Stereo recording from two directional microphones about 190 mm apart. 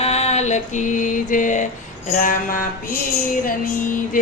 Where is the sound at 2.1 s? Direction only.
45° left (ahead or behind).